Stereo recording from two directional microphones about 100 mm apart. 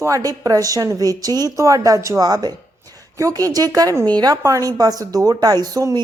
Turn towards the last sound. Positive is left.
turn(degrees=-40)  # may be behind; listen again after turning